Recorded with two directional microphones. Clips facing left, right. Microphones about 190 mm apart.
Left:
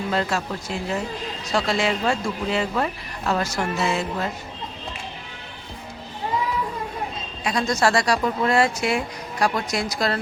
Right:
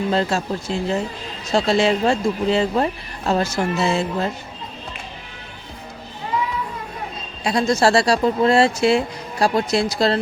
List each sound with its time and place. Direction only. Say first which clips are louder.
0.1 s speech: right 4 dB; 30° right (ahead or behind)
7.4 s speech: right 4 dB; 30° right (ahead or behind)